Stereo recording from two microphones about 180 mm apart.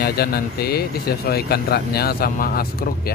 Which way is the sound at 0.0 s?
60° left (ahead or behind).